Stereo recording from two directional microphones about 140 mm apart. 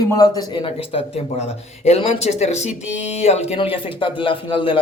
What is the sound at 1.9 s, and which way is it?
Speech, 50° left (ahead or behind).